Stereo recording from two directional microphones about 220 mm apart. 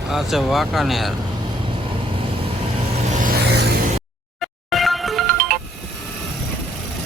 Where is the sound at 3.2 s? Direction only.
50° right (ahead or behind).